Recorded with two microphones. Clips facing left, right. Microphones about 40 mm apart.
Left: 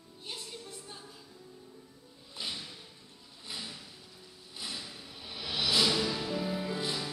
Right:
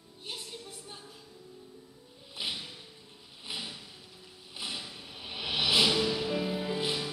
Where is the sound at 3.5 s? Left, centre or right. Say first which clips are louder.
Right 3 dB; right.